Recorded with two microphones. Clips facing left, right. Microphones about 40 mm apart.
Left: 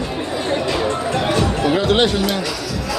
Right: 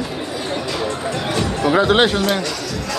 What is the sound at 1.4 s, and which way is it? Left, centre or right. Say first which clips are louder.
Music: left 1 dB; centre.